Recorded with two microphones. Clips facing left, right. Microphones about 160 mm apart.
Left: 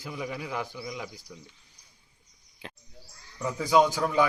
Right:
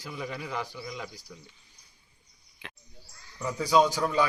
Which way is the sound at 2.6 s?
35° left (ahead or behind).